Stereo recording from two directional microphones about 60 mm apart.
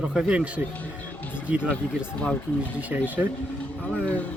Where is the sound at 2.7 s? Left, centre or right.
Right.